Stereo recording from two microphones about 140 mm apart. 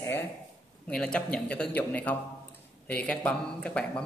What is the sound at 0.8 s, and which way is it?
A man's voice, 5° left (ahead or behind).